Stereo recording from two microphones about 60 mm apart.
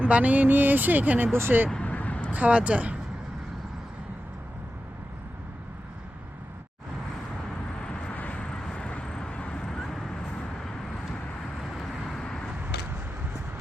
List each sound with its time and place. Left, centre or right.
0.1 s speech: right
1.3 s speech: right
1.7 s vehicle: left
2.3 s speech: right
8.1 s vehicle: left
9.0 s vehicle: centre
9.3 s a sound: centre
9.6 s vehicle: centre
11.7 s vehicle: centre
12.2 s a sound: centre